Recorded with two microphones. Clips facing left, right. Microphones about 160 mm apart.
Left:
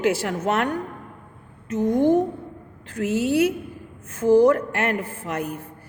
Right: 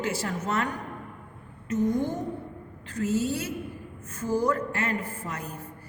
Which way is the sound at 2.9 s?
70° left (ahead or behind).